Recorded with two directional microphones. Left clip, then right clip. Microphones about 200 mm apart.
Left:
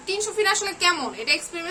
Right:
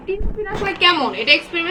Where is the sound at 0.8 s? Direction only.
10° left (ahead or behind).